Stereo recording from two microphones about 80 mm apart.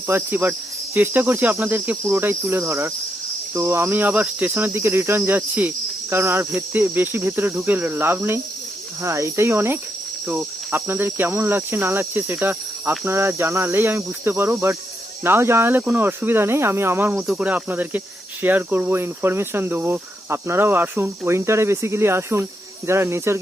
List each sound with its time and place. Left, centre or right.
0.1 s cricket: right
2.6 s speech: right
3.5 s cricket: right
9.0 s speech: right
10.2 s cricket: right
15.9 s speech: right
17.3 s cricket: centre
21.2 s speech: right